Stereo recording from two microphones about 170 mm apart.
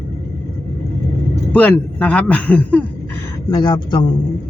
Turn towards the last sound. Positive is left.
turn(degrees=25)  # may be behind; listen again after turning